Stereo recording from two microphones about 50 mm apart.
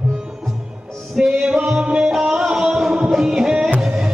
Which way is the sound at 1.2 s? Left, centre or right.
Centre.